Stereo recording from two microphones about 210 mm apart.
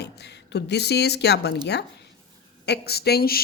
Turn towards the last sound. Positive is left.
turn(degrees=45)  # may be behind; listen again after turning